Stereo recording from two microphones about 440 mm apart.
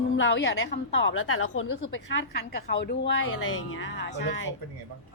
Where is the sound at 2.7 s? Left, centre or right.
Left.